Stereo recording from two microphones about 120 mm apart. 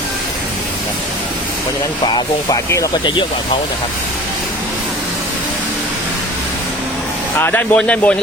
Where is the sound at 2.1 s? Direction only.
40° left (ahead or behind).